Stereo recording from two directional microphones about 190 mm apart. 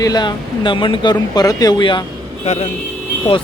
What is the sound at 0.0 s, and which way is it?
Speech, 20° left (ahead or behind).